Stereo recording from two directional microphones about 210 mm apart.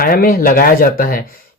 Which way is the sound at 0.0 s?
45° left (ahead or behind).